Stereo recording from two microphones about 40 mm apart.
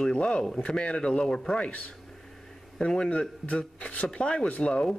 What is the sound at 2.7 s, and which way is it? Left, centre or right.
Speech, centre.